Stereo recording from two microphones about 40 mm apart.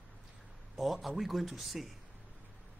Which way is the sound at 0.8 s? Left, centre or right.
Centre.